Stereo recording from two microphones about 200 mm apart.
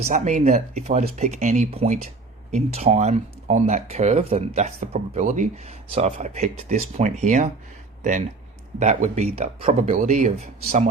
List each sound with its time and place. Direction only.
0.0 s speech: 35° right (ahead or behind)
8.8 s speech: 35° right (ahead or behind)